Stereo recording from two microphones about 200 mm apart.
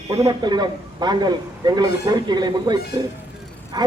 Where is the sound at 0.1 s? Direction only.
20° right (ahead or behind).